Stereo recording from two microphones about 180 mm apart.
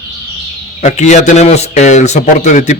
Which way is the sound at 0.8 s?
40° left (ahead or behind).